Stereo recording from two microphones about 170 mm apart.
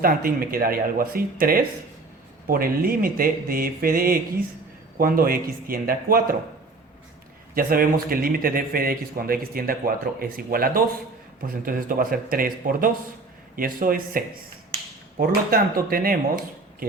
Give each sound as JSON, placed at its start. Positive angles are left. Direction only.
{"t": 0.0, "sound": "a man's voice", "side_deg": -60}
{"t": 7.5, "sound": "a man's voice", "side_deg": -60}